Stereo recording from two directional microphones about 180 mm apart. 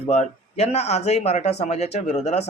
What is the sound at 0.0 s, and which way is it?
Speech, 35° left (ahead or behind).